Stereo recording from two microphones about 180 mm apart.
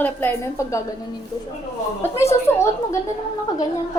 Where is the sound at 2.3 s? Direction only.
15° left (ahead or behind).